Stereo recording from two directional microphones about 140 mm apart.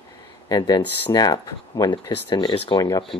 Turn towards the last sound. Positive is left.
turn(degrees=25)  # may be behind; listen again after turning